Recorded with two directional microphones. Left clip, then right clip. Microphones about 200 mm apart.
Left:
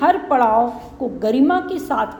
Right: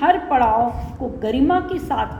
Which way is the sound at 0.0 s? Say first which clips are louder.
Left 1 dB; 40° left (ahead or behind).